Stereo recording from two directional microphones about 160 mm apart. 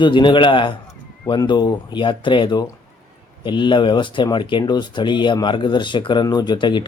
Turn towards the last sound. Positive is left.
turn(degrees=30)  # may be behind; listen again after turning